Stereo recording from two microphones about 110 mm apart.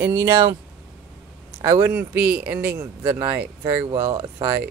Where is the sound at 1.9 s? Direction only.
15° right (ahead or behind).